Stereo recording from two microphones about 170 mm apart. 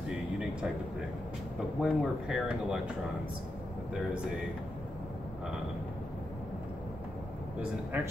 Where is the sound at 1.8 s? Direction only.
Centre (ahead or behind).